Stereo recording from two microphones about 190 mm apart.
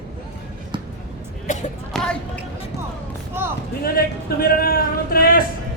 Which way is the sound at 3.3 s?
10° right (ahead or behind).